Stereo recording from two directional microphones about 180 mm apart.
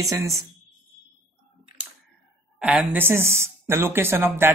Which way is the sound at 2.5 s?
5° right (ahead or behind).